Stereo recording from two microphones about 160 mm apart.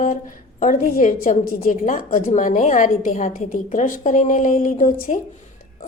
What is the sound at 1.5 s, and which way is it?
Speech, 40° left (ahead or behind).